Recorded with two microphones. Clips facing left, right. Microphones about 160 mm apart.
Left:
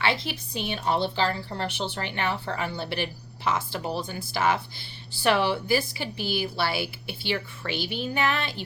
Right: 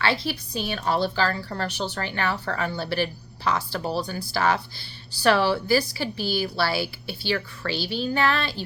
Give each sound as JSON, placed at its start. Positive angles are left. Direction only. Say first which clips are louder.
{"t": 0.0, "sound": "a woman's voice", "louder": "right 2 dB", "side_deg": 20}